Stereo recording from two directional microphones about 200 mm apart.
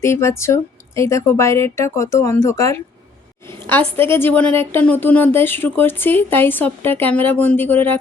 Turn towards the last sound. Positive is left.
turn(degrees=10)  # may be behind; listen again after turning